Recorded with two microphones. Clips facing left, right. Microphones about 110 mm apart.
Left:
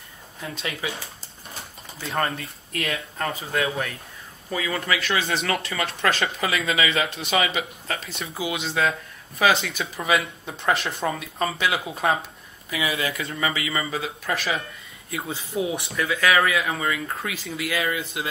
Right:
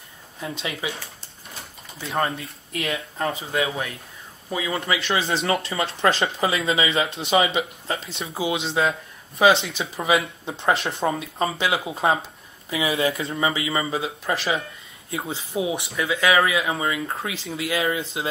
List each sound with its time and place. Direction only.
0.4 s speech: 25° right (ahead or behind)
2.0 s speech: 5° right (ahead or behind)
2.3 s speech: 25° right (ahead or behind)